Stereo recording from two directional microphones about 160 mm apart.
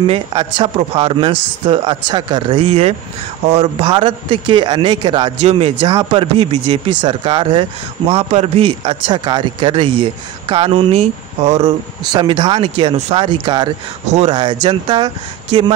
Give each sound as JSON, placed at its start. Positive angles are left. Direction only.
{"t": 0.0, "sound": "speech", "side_deg": -35}
{"t": 3.9, "sound": "speech", "side_deg": -30}
{"t": 5.9, "sound": "speech", "side_deg": -25}
{"t": 6.3, "sound": "speech", "side_deg": -35}
{"t": 12.1, "sound": "speech", "side_deg": -30}